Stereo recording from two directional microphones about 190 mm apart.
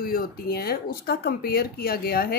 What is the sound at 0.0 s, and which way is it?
A woman's voice, 50° left (ahead or behind).